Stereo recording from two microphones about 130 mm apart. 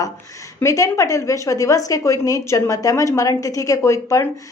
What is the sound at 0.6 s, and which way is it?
Speech, 25° left (ahead or behind).